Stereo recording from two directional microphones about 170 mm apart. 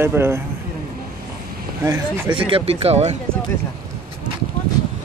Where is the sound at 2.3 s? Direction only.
30° right (ahead or behind).